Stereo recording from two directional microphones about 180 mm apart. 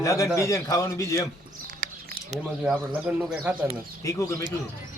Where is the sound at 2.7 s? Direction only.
10° right (ahead or behind).